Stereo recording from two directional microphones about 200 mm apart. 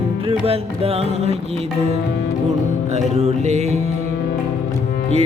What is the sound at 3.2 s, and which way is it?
Music, 35° right (ahead or behind).